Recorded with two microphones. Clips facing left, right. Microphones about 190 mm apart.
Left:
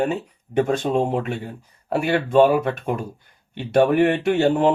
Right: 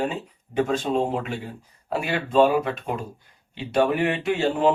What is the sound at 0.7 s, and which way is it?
Speech, 55° left (ahead or behind).